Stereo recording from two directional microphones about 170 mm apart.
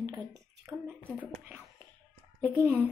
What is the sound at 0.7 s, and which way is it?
Speech, 10° right (ahead or behind).